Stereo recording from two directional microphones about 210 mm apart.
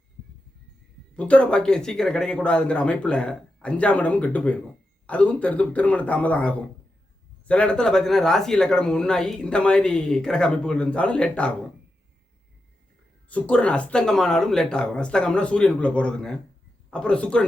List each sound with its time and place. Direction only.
1.1 s a man's voice: 5° left (ahead or behind)
13.2 s speech: 5° left (ahead or behind)